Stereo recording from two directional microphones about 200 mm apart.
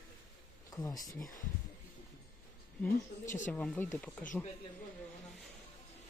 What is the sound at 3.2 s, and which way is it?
Speech, 40° left (ahead or behind).